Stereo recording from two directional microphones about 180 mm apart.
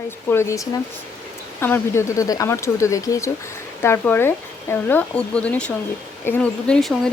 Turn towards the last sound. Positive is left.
turn(degrees=0)  # may be behind; listen again after turning